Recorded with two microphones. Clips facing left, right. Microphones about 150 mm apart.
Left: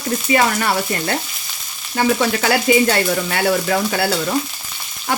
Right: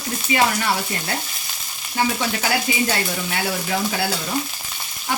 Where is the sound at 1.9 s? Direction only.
70° left (ahead or behind).